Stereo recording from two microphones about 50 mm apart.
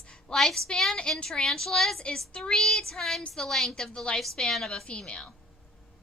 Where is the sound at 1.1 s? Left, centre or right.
Centre.